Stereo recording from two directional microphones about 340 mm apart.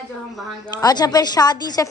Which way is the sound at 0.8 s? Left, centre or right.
Centre.